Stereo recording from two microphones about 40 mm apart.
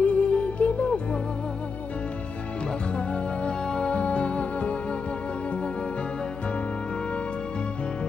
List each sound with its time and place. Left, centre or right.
0.0 s music: left
2.9 s music: left